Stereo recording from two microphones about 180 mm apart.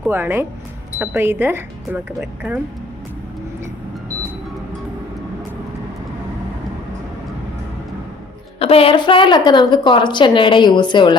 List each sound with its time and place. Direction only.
0.1 s speech: 10° right (ahead or behind)
8.5 s a woman's voice: 35° left (ahead or behind)